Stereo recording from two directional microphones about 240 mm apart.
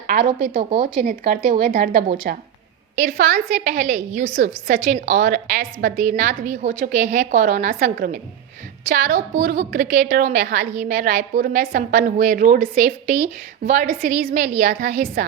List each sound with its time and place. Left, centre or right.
0.5 s a woman's voice: right